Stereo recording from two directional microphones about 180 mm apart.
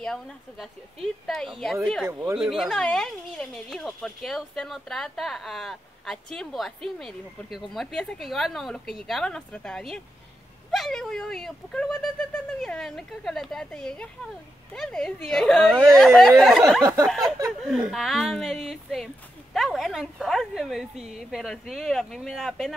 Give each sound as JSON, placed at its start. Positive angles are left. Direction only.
{"t": 0.0, "sound": "speech", "side_deg": 5}
{"t": 16.8, "sound": "a sound", "side_deg": -15}
{"t": 17.6, "sound": "speech", "side_deg": 0}